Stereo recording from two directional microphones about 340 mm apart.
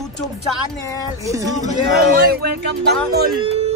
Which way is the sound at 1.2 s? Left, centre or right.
Centre.